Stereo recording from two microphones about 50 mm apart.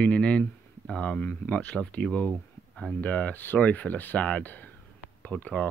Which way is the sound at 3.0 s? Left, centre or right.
Left.